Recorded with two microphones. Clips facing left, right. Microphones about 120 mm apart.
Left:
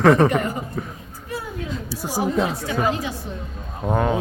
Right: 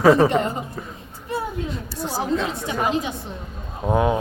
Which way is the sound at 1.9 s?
10° left (ahead or behind).